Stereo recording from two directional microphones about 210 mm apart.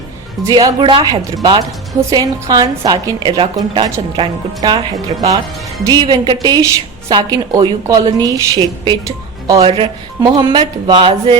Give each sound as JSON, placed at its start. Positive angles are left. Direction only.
{"t": 0.4, "sound": "a woman's voice", "side_deg": -20}